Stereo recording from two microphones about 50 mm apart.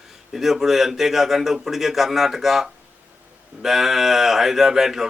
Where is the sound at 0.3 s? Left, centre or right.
Centre.